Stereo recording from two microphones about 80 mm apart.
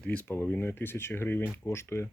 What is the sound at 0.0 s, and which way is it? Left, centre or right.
Speech, centre.